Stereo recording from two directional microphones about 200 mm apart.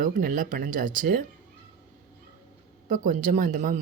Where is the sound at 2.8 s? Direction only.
40° right (ahead or behind).